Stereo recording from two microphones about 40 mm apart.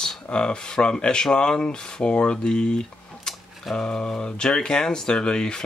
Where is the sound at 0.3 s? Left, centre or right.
Left.